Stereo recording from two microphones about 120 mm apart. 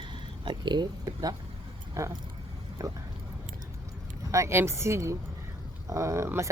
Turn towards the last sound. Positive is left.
turn(degrees=-25)  # may be behind; listen again after turning